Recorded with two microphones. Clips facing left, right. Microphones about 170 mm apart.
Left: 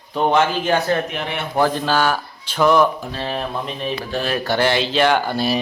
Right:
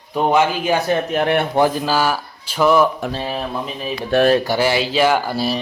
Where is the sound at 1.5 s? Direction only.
10° right (ahead or behind).